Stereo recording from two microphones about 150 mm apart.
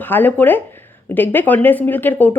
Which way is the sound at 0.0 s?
15° left (ahead or behind).